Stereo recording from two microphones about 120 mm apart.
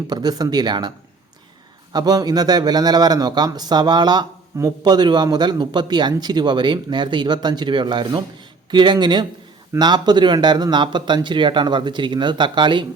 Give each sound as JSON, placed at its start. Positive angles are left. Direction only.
{"t": 0.1, "sound": "a man's voice", "side_deg": -35}